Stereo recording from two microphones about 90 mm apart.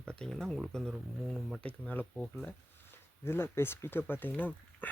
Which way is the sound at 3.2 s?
25° left (ahead or behind).